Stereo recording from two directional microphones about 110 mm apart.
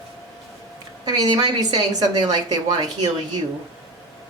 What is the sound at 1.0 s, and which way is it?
A woman's voice, 40° right (ahead or behind).